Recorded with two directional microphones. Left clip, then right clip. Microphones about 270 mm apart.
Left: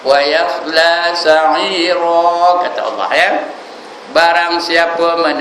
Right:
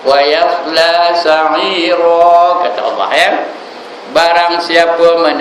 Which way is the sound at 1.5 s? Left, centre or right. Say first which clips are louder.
Right 2 dB; left.